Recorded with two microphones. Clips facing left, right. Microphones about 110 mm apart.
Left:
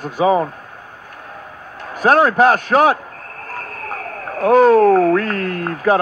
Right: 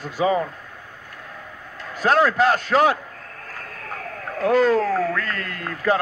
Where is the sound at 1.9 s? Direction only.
55° left (ahead or behind).